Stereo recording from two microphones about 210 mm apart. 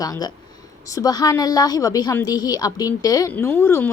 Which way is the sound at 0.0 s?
20° left (ahead or behind).